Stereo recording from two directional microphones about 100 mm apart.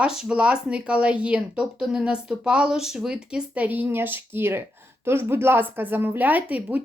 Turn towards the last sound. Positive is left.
turn(degrees=-15)  # may be behind; listen again after turning